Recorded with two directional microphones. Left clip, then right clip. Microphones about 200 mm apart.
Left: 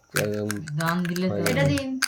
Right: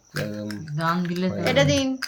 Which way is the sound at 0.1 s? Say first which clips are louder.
Left 5 dB; 40° left (ahead or behind).